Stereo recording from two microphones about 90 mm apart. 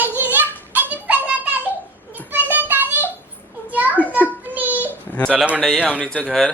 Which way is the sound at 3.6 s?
20° right (ahead or behind).